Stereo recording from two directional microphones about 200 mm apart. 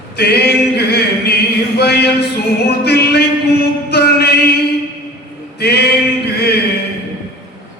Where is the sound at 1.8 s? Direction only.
55° left (ahead or behind).